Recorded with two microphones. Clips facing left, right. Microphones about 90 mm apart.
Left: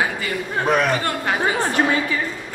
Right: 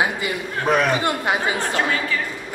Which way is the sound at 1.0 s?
15° right (ahead or behind).